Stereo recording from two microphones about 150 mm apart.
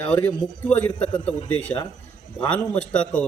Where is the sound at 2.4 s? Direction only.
10° left (ahead or behind).